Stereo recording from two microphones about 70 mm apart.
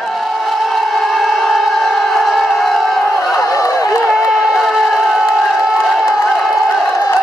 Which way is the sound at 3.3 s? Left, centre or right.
Left.